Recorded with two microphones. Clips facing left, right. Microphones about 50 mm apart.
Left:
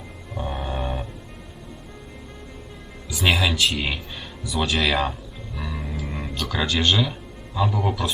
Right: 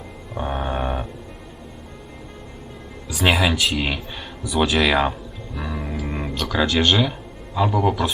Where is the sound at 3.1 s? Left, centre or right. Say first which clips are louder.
Right 2 dB; right.